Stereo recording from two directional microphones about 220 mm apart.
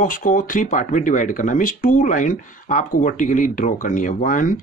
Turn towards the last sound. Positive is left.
turn(degrees=35)  # may be behind; listen again after turning